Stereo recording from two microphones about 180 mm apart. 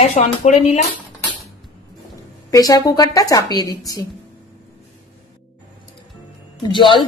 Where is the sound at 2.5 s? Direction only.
20° left (ahead or behind).